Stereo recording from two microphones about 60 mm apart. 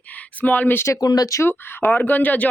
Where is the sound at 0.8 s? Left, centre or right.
Left.